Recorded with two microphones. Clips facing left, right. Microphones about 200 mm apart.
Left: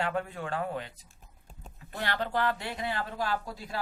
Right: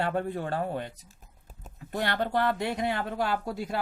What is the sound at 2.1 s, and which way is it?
Speech, 55° right (ahead or behind).